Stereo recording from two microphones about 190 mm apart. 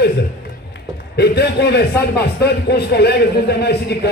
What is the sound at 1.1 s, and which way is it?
Speech, 60° left (ahead or behind).